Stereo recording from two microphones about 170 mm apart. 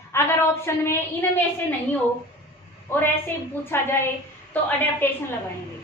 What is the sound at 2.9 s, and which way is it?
A woman's voice, 15° left (ahead or behind).